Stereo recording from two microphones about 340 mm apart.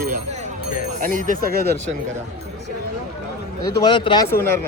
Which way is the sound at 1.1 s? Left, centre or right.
Right.